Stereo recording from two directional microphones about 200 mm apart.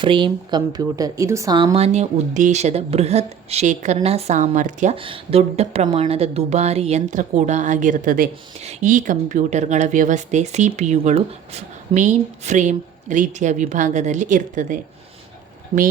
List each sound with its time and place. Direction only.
0.0 s speech: 25° right (ahead or behind); by 8.3 s 45° right (ahead or behind)
8.5 s speech: 30° right (ahead or behind)